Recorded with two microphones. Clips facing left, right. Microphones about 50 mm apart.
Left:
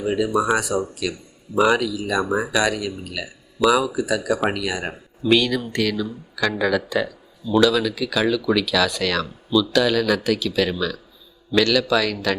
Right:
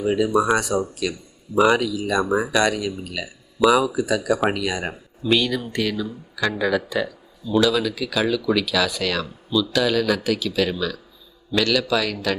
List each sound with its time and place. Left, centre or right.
0.0 s speech: centre